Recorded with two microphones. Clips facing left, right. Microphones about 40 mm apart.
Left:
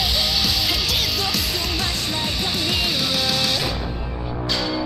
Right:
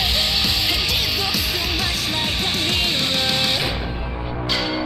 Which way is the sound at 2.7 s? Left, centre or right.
Centre.